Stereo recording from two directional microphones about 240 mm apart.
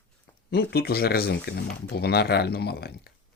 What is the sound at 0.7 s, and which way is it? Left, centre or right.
Speech, left.